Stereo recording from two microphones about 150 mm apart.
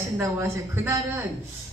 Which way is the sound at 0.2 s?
20° right (ahead or behind).